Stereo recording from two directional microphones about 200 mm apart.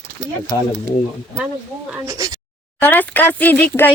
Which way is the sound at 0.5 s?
15° left (ahead or behind).